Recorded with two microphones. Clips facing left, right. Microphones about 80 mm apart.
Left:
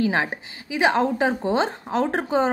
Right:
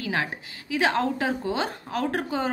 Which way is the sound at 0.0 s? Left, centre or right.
Left.